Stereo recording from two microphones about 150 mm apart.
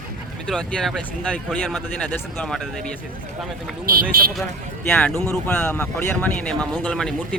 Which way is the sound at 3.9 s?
75° right (ahead or behind).